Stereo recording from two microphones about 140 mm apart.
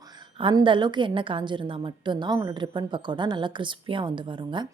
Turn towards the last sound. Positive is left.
turn(degrees=-35)  # may be behind; listen again after turning